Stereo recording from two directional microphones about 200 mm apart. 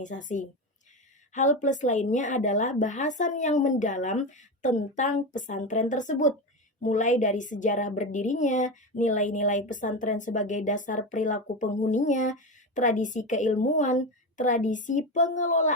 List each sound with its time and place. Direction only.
0.0 s a woman's voice: 40° left (ahead or behind)